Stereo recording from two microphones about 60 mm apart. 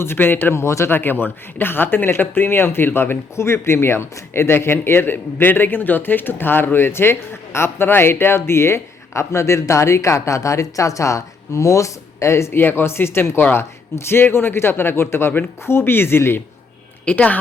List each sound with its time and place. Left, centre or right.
0.0 s speech: left
0.9 s speech: left
17.1 s a woman's voice: left